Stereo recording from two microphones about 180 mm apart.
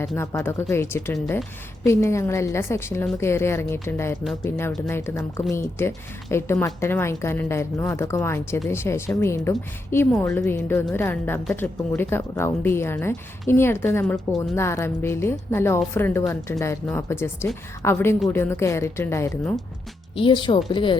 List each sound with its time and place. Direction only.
0.2 s a woman's voice: 15° left (ahead or behind)
20.1 s speech: 25° left (ahead or behind)